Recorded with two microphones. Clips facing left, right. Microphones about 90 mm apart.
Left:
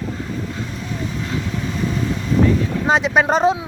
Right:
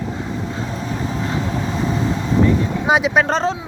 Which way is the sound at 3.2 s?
10° left (ahead or behind).